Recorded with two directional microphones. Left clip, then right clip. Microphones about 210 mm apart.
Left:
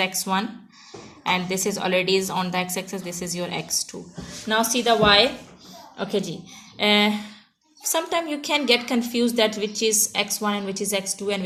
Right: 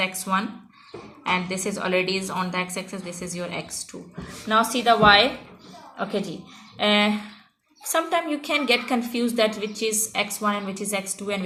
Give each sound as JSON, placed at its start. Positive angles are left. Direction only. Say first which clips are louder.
{"t": 0.0, "sound": "a woman's voice", "louder": "left 1 dB", "side_deg": 50}